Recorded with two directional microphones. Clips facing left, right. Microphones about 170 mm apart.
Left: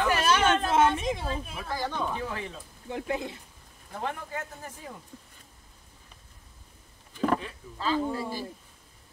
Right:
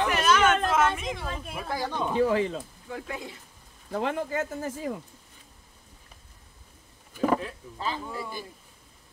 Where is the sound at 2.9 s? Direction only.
25° left (ahead or behind).